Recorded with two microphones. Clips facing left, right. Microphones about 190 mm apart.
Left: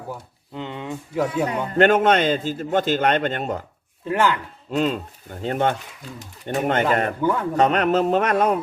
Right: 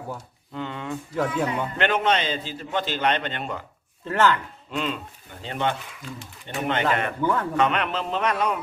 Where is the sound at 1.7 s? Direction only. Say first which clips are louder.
Left 10 dB; 45° left (ahead or behind).